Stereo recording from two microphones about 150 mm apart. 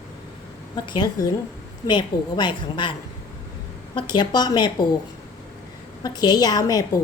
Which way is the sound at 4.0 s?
30° left (ahead or behind).